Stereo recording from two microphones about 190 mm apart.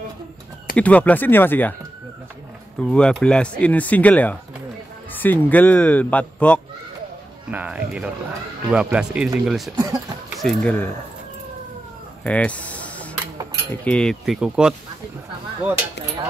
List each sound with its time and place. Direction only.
0.7 s speech: 5° left (ahead or behind)
2.9 s speech: 5° left (ahead or behind)
7.5 s speech: 5° right (ahead or behind)
9.8 s speech: 20° right (ahead or behind)
10.4 s speech: 5° left (ahead or behind)
12.2 s a sound: 5° left (ahead or behind)
13.8 s speech: 5° left (ahead or behind)